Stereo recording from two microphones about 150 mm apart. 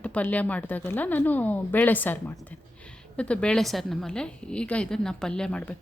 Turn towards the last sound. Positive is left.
turn(degrees=5)  # may be behind; listen again after turning